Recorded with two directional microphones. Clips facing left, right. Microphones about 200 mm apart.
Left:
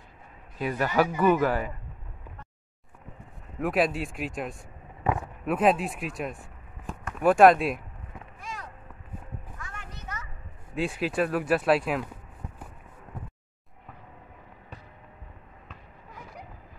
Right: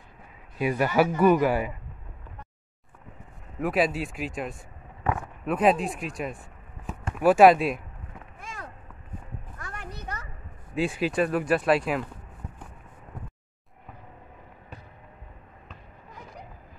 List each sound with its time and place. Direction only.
0.6 s speech: 10° right (ahead or behind)
3.5 s speech: centre (ahead or behind)
8.4 s a sound: 50° right (ahead or behind)
9.6 s music: 40° right (ahead or behind)
10.7 s speech: centre (ahead or behind)